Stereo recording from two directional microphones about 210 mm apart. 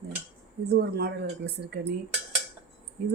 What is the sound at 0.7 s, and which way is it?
Speech, 50° right (ahead or behind).